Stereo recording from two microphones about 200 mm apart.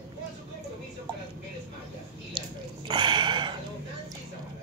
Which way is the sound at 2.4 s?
25° right (ahead or behind).